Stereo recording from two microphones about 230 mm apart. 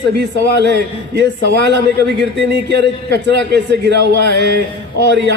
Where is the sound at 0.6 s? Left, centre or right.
Right.